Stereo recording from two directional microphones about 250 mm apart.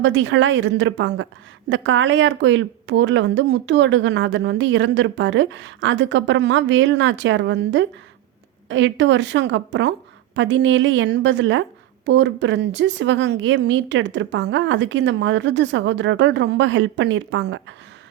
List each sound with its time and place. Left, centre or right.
0.0 s a woman's voice: right